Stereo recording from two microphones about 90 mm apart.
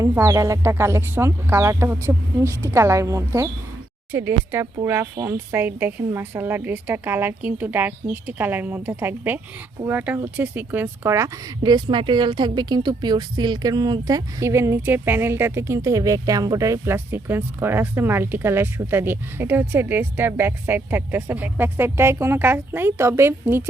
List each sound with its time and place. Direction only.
0.0 s speech: 35° right (ahead or behind)
4.1 s speech: 25° right (ahead or behind)
5.2 s speech: 35° right (ahead or behind)
5.5 s speech: 20° right (ahead or behind)
11.6 s a woman's voice: 55° right (ahead or behind); by 23.6 s 25° right (ahead or behind)